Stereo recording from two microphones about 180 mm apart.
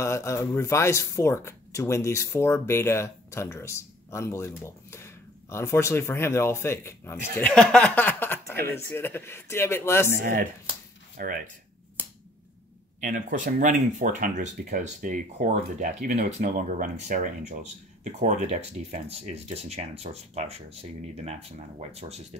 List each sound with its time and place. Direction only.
0.0 s speech: 15° left (ahead or behind)
10.1 s speech: 50° right (ahead or behind)
13.0 s speech: 45° right (ahead or behind)